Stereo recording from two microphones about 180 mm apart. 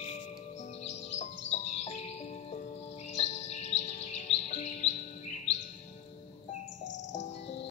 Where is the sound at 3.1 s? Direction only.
40° left (ahead or behind).